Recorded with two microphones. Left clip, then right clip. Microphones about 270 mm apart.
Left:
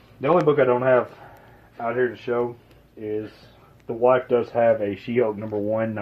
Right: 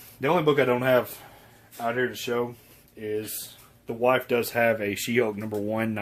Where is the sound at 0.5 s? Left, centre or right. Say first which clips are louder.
Left 4 dB; right.